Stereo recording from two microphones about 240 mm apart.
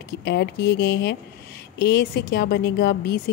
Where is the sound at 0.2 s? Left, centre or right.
Left.